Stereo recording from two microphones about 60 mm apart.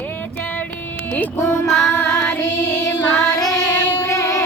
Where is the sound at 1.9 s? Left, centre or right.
Left.